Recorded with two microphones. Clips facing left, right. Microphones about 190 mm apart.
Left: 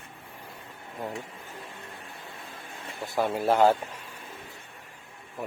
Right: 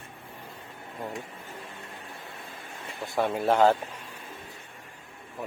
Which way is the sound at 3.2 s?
Centre (ahead or behind).